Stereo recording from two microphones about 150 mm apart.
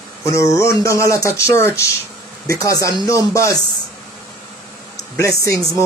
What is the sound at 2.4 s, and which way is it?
Speech, 20° left (ahead or behind).